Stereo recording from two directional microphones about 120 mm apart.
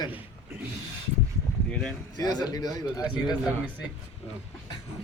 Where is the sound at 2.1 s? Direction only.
35° left (ahead or behind).